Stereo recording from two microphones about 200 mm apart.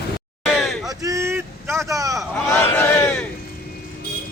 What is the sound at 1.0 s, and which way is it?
Vehicle, 15° right (ahead or behind).